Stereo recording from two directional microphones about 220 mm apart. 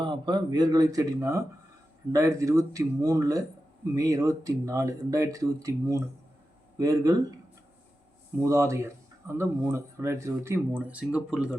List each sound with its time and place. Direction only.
0.0 s speech: 20° right (ahead or behind)
8.4 s speech: 15° right (ahead or behind)